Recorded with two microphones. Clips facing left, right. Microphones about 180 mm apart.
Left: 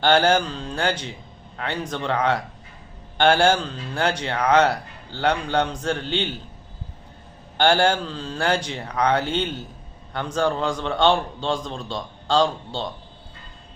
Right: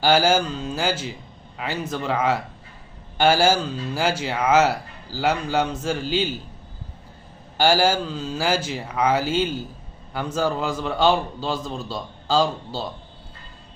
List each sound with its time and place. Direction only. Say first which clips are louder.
0.0 s speech: even; 5° right (ahead or behind)
7.5 s speech: even; 5° right (ahead or behind)